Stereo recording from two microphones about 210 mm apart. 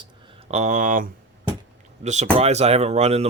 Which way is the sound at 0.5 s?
35° right (ahead or behind).